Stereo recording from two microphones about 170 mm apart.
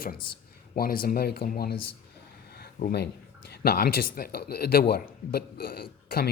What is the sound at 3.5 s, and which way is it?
Speech, 65° left (ahead or behind).